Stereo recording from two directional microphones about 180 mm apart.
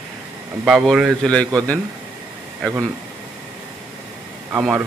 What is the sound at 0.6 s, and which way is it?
A man's voice, 5° right (ahead or behind).